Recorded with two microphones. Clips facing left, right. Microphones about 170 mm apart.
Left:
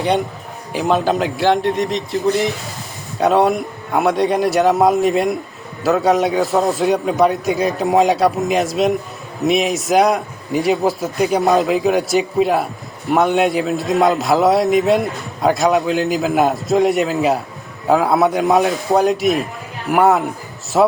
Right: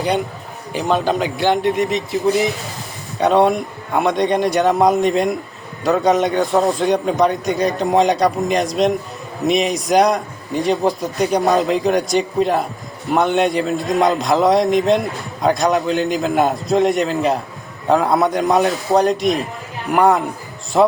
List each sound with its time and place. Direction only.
0.7 s a man's voice: 5° left (ahead or behind)